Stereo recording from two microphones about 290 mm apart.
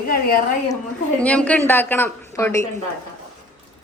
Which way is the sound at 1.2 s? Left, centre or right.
Centre.